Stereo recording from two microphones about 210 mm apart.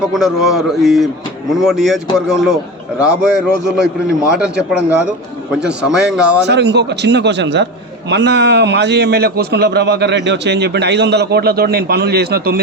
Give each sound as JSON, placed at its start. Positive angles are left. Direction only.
{"t": 0.0, "sound": "a man's voice", "side_deg": 0}
{"t": 6.4, "sound": "a man's voice", "side_deg": -55}